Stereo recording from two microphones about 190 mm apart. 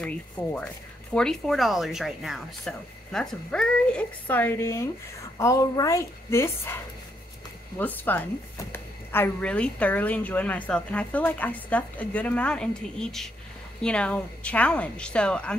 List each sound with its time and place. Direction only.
0.0 s a woman's voice: 5° left (ahead or behind)